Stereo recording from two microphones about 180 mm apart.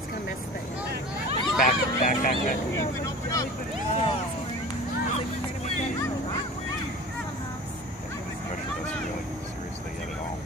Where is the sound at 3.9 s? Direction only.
35° left (ahead or behind).